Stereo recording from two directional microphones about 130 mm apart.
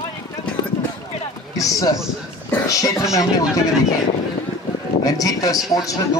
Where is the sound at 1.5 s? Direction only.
25° left (ahead or behind).